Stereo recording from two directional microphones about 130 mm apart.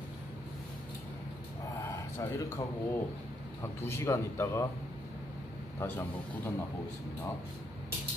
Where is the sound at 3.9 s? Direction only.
20° left (ahead or behind).